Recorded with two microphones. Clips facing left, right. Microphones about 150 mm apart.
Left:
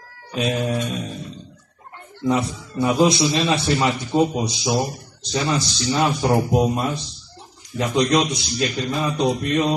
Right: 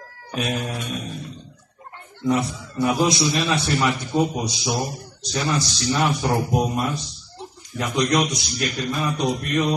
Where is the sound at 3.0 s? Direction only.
25° left (ahead or behind).